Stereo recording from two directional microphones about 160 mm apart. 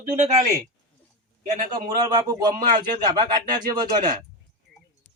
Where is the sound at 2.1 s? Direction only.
25° right (ahead or behind).